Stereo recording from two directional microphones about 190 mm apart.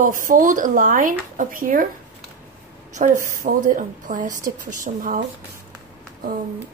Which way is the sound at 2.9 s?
40° right (ahead or behind).